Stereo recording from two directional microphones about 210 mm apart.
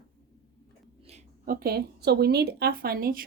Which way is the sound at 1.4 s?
45° right (ahead or behind).